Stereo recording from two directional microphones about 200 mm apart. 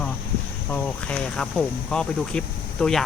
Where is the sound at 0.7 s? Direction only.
5° left (ahead or behind).